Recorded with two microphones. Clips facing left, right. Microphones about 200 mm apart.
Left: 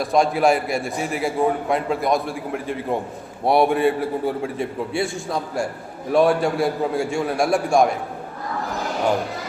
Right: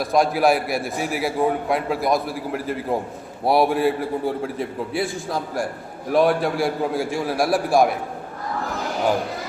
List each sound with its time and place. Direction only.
0.0 s a man's voice: centre (ahead or behind)